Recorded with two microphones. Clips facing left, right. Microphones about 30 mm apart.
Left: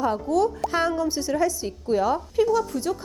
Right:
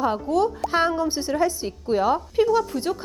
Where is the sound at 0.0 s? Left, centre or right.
Centre.